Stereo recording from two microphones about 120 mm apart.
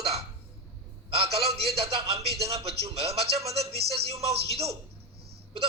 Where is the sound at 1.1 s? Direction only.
55° right (ahead or behind).